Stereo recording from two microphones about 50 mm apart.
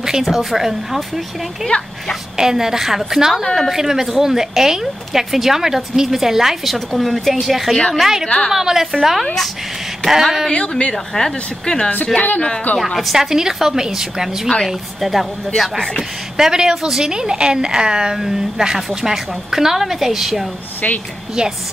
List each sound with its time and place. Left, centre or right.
0.0 s a woman's voice: centre
9.2 s a woman's voice: centre
10.5 s a woman's voice: centre
12.2 s speech: left
12.7 s a woman's voice: centre
21.4 s a woman's voice: centre